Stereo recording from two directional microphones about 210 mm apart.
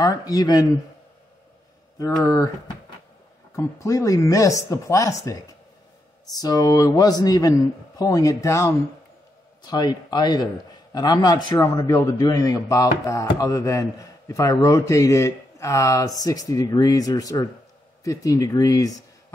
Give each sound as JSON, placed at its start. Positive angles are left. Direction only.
{"t": 0.0, "sound": "a man's voice", "side_deg": 15}
{"t": 2.2, "sound": "a man's voice", "side_deg": 15}
{"t": 3.5, "sound": "a man's voice", "side_deg": 15}